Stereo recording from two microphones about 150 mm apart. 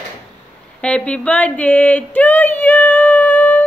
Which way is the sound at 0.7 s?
10° left (ahead or behind).